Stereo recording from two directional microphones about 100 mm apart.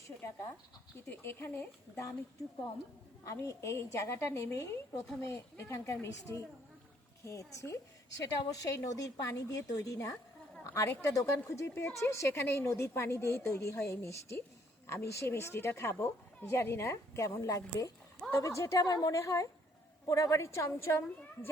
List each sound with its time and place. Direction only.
1.0 s a woman's voice: 20° left (ahead or behind)
3.4 s a woman's voice: 30° left (ahead or behind)